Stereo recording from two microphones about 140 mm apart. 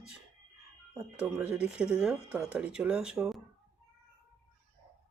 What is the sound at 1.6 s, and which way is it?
Speech, 5° right (ahead or behind).